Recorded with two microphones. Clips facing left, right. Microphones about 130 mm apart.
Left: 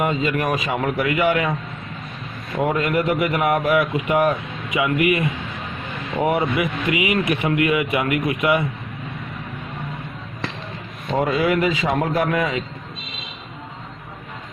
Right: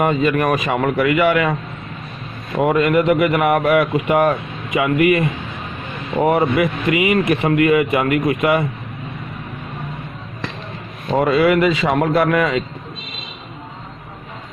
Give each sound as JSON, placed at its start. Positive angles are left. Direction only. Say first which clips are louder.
{"t": 0.0, "sound": "speech", "louder": "right 5 dB", "side_deg": -60}
{"t": 2.6, "sound": "speech", "louder": "right 5 dB", "side_deg": -65}
{"t": 6.2, "sound": "speech", "louder": "right 5 dB", "side_deg": -50}
{"t": 11.2, "sound": "speech", "louder": "right 5 dB", "side_deg": -70}